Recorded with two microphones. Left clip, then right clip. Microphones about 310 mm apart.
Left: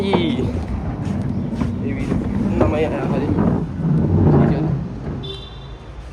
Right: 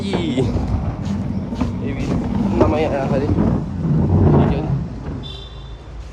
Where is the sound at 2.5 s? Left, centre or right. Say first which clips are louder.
Right 2 dB; centre.